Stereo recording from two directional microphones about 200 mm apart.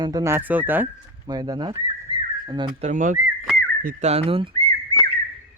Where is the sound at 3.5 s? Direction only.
45° right (ahead or behind); by 4.5 s 30° right (ahead or behind).